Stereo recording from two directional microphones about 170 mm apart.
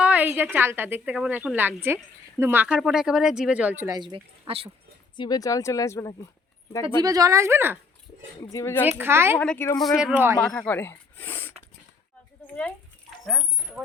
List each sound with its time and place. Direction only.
0.0 s speech: 10° right (ahead or behind)
3.8 s speech: 25° right (ahead or behind)
5.1 s speech: 25° left (ahead or behind)
6.8 s speech: 20° right (ahead or behind)
8.4 s a woman's voice: 15° left (ahead or behind)
9.0 s speech: 15° right (ahead or behind)
9.4 s a woman's voice: 10° left (ahead or behind)
10.0 s speech: 10° right (ahead or behind)
10.3 s speech: 5° left (ahead or behind)
13.2 s a sound: centre (ahead or behind)